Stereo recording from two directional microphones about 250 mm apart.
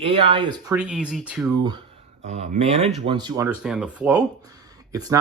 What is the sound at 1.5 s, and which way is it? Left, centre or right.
Speech, centre.